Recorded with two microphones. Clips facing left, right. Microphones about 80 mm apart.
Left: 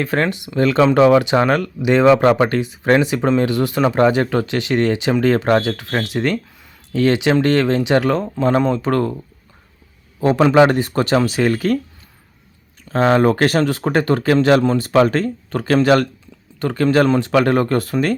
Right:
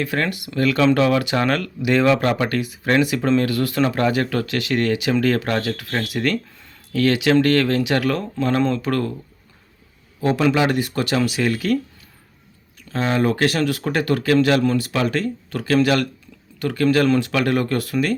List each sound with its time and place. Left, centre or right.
0.0 s speech: left
10.2 s speech: left
12.9 s speech: left